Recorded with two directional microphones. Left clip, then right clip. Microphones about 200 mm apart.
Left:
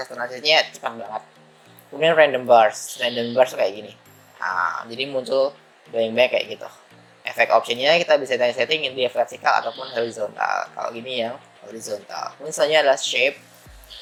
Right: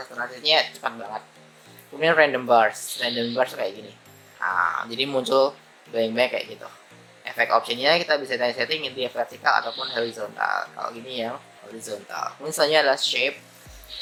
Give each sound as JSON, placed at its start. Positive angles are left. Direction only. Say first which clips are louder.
{"t": 0.0, "sound": "speech", "louder": "left 3 dB", "side_deg": 10}